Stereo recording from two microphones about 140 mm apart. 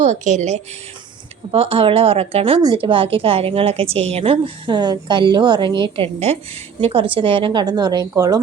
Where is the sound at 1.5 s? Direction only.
40° right (ahead or behind).